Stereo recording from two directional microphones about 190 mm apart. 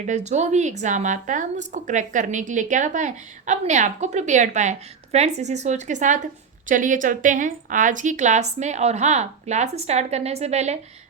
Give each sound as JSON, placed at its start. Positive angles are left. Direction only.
{"t": 0.0, "sound": "a woman's voice", "side_deg": -40}